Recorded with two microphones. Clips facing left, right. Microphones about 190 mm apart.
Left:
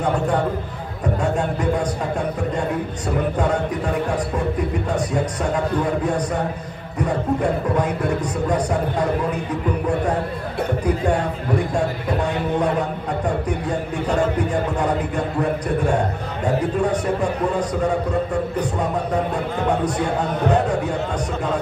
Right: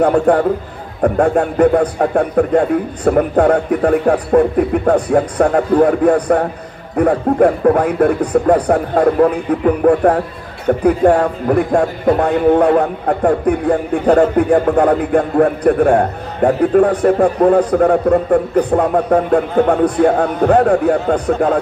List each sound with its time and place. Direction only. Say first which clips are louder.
0.0 s a man's voice: right 9 dB; 55° right (ahead or behind)